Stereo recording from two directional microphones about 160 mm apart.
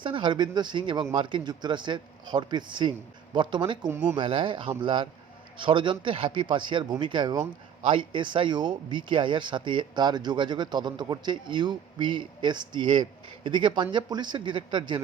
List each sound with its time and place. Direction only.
0.0 s speech: 30° right (ahead or behind)